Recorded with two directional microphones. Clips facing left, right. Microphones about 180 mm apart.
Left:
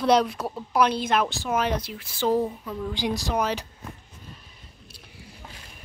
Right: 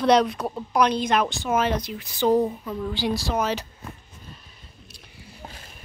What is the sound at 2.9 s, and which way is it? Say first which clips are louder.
Speech: right 1 dB; 15° left (ahead or behind).